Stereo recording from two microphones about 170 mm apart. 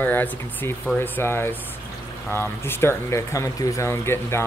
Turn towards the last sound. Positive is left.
turn(degrees=15)  # may be behind; listen again after turning